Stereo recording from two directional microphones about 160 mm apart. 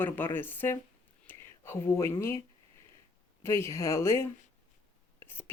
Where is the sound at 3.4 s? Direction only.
15° left (ahead or behind).